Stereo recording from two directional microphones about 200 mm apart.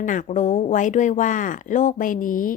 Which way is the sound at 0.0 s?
40° left (ahead or behind).